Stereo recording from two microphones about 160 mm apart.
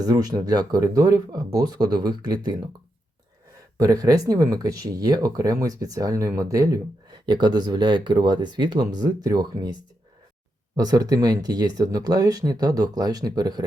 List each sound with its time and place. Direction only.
0.0 s speech: 25° right (ahead or behind)
3.8 s speech: 25° right (ahead or behind)
10.8 s speech: 25° right (ahead or behind)